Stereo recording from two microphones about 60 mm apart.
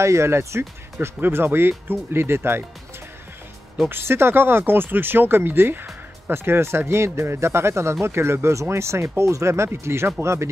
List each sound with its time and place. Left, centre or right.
0.0 s speech: right
1.0 s speech: right
3.9 s speech: right